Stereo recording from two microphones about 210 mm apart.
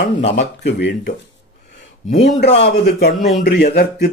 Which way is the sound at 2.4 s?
55° left (ahead or behind).